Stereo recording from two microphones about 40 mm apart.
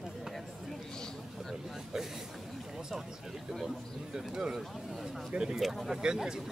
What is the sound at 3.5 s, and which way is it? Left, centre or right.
Speech, centre.